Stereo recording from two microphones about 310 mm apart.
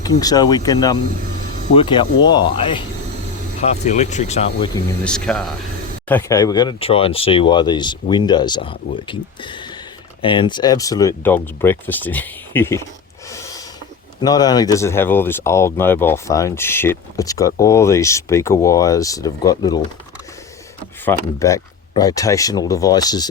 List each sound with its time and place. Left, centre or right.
0.0 s speech: centre
5.0 s speech: centre
13.3 s snort: centre
14.2 s speech: centre
21.0 s speech: centre